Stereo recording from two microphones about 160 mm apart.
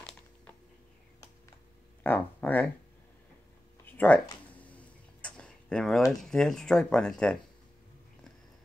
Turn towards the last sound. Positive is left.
turn(degrees=5)  # may be behind; listen again after turning